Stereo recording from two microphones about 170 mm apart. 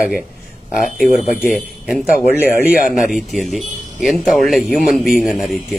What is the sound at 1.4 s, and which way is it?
Speech, 5° right (ahead or behind).